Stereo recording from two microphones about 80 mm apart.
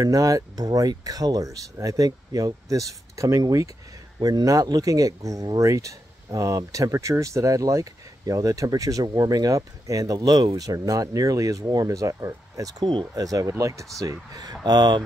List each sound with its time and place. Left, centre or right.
0.0 s speech: right
4.2 s speech: right
13.9 s speech: right